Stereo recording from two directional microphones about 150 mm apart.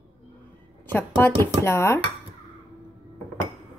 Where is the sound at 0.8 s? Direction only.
15° left (ahead or behind).